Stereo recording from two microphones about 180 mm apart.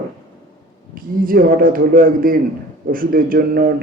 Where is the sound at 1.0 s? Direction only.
50° right (ahead or behind).